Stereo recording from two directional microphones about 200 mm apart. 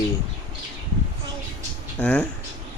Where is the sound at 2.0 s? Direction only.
5° left (ahead or behind).